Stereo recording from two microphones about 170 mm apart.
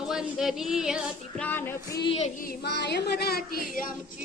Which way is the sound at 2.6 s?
80° left.